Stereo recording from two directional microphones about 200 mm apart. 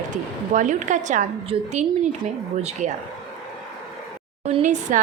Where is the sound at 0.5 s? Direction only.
40° right (ahead or behind).